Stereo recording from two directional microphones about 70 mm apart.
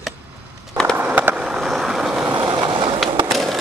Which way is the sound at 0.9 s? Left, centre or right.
Right.